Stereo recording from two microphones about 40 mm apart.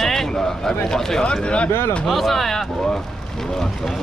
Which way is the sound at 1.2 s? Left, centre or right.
Left.